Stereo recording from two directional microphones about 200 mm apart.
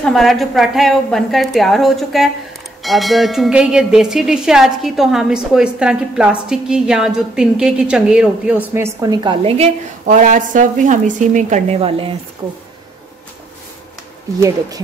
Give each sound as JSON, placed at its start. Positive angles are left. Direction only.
{"t": 0.0, "sound": "speech", "side_deg": 0}
{"t": 10.0, "sound": "a woman's voice", "side_deg": -40}